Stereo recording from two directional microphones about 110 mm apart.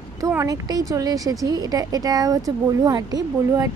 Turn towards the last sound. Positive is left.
turn(degrees=-30)  # may be behind; listen again after turning